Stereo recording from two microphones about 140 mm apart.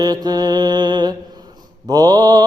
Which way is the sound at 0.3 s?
30° right (ahead or behind).